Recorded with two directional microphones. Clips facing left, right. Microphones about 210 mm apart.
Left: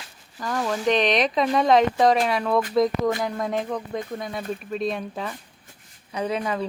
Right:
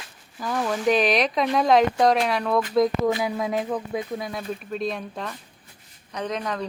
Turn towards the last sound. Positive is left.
turn(degrees=5)  # may be behind; listen again after turning